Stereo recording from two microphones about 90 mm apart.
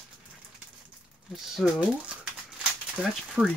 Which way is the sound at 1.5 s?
5° right (ahead or behind).